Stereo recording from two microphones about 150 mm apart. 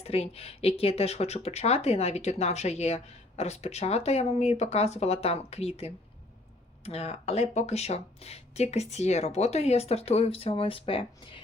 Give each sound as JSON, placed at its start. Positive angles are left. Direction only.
{"t": 0.0, "sound": "speech", "side_deg": 40}